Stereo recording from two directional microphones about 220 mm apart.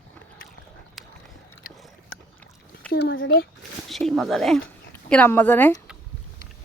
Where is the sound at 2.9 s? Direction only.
50° left (ahead or behind).